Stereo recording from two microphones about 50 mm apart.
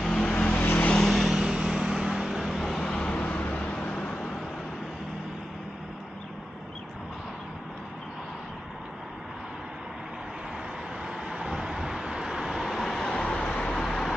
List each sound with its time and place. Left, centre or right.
0.0 s vehicle: centre
0.3 s vehicle: left
0.7 s vehicle: left
0.9 s vehicle: centre
2.7 s vehicle: centre
11.2 s vehicle: centre
12.8 s vehicle: centre